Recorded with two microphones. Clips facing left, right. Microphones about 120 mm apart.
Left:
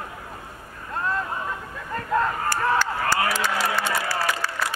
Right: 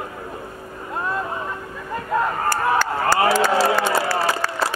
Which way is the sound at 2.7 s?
45° right (ahead or behind).